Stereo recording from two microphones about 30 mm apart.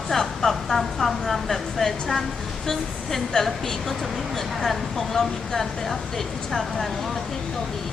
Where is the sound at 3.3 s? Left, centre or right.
Left.